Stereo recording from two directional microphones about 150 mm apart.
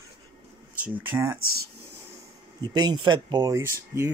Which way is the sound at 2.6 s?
30° right (ahead or behind).